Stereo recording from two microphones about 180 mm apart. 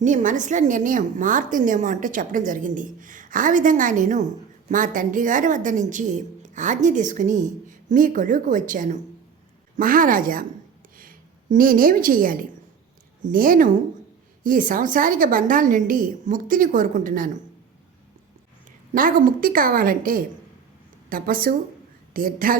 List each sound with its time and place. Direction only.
0.0 s a woman's voice: 45° right (ahead or behind)
18.9 s a woman's voice: 50° right (ahead or behind)